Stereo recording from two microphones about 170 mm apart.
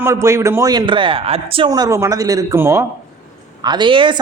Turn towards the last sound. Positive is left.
turn(degrees=-30)  # may be behind; listen again after turning